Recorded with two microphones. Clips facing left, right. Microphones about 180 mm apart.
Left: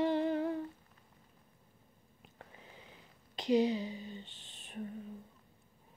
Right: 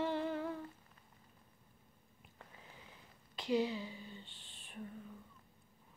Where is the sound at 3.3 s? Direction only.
20° left (ahead or behind).